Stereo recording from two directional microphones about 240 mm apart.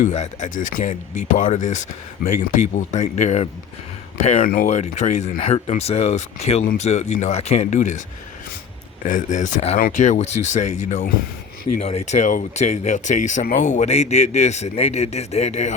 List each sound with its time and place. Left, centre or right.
0.0 s a man's voice: left
9.0 s a man's voice: left
11.8 s a man's voice: left